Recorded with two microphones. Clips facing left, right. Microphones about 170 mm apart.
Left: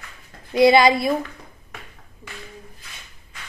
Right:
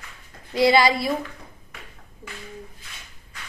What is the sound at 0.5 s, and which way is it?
Speech, 20° left (ahead or behind).